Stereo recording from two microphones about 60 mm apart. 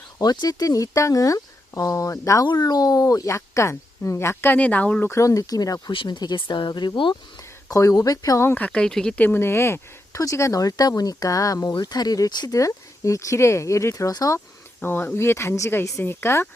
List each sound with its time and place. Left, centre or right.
0.2 s speech: left
3.3 s speech: left
4.5 s speech: left
5.0 s speech: left
7.7 s speech: left
8.5 s speech: left
8.8 s speech: centre
9.3 s speech: left
10.2 s speech: left
10.5 s speech: left
14.8 s speech: left
15.1 s speech: left